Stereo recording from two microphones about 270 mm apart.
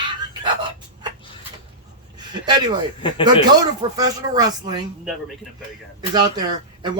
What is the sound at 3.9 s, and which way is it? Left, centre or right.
Speech, centre.